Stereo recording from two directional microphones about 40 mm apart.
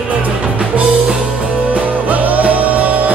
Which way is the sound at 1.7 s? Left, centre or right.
Right.